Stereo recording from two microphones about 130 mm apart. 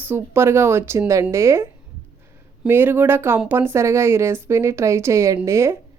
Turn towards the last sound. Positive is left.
turn(degrees=-20)  # may be behind; listen again after turning